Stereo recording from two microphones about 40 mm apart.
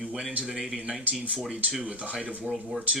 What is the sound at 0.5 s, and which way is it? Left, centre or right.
Speech, centre.